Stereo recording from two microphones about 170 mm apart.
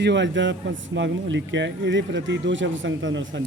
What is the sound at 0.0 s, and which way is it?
Speech, 90° right.